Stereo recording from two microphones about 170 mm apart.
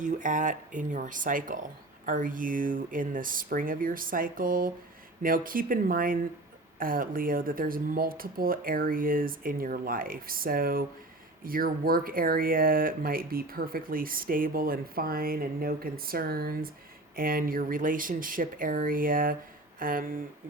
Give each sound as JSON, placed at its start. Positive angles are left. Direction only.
{"t": 0.0, "sound": "speech", "side_deg": -50}